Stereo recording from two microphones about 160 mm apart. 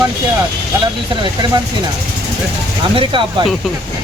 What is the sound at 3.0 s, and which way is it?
Speech, 30° right (ahead or behind).